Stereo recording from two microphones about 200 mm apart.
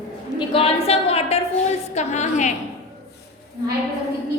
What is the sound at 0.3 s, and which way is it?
A woman's voice, 30° left (ahead or behind).